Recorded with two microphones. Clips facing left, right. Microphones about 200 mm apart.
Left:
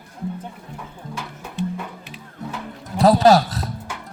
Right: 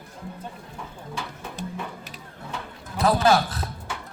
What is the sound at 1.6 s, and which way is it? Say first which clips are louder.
Music: left 10 dB; 40° right (ahead or behind).